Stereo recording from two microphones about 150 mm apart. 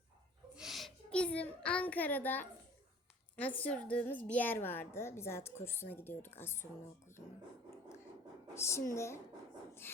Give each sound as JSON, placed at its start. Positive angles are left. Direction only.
{"t": 0.5, "sound": "a sound", "side_deg": 0}
{"t": 3.6, "sound": "a woman's voice", "side_deg": 10}
{"t": 8.5, "sound": "a woman's voice", "side_deg": 20}